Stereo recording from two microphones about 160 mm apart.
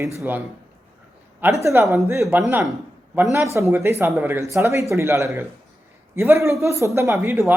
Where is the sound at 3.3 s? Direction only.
20° right (ahead or behind).